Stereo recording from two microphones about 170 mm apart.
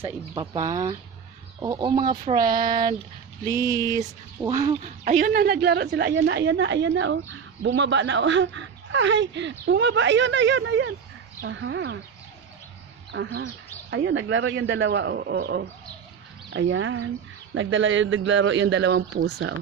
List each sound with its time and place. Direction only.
0.0 s speech: 20° right (ahead or behind)
4.8 s a woman's voice: 45° right (ahead or behind); by 12.0 s 90° right
13.1 s speech: 90° right; by 15.6 s 75° right (ahead or behind)
16.4 s a sound: 90° right
17.6 s speech: 90° right
19.2 s a woman's voice: 80° right